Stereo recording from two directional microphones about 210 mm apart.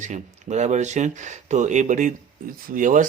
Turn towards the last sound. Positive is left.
turn(degrees=-40)  # may be behind; listen again after turning